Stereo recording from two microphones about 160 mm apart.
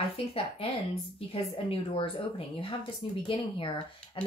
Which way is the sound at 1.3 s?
35° left (ahead or behind).